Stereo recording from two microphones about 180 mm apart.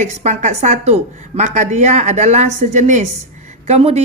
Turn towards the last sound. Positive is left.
turn(degrees=-35)  # may be behind; listen again after turning